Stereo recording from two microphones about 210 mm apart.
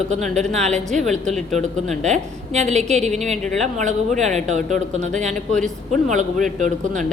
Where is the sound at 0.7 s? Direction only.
Centre (ahead or behind).